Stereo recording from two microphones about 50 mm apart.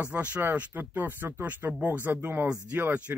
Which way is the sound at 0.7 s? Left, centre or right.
Right.